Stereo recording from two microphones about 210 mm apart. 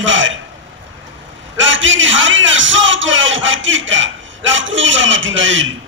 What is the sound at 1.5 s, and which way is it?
A man's voice, 65° right (ahead or behind).